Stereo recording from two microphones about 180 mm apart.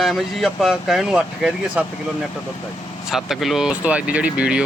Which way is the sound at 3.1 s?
Centre (ahead or behind).